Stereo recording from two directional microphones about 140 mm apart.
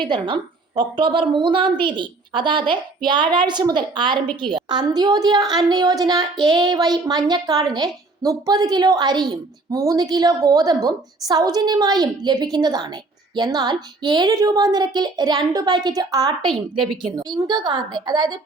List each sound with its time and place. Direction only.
0.0 s a woman's voice: 35° right (ahead or behind)